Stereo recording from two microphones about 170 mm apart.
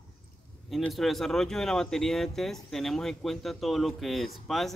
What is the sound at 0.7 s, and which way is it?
Speech, centre (ahead or behind).